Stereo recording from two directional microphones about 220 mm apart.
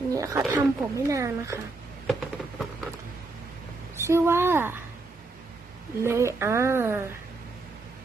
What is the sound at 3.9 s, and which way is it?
Speech, 10° right (ahead or behind).